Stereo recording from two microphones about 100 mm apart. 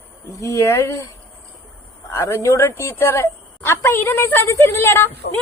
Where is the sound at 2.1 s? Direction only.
30° left (ahead or behind).